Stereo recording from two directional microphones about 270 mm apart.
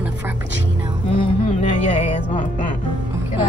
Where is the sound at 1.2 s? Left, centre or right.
Left.